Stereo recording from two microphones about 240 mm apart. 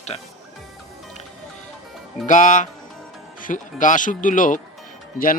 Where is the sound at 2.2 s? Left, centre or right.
Left.